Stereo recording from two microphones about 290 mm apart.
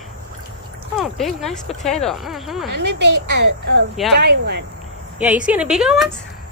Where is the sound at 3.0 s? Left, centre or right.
Right.